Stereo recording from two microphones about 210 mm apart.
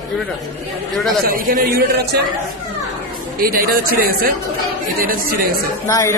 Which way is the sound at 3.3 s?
45° right (ahead or behind).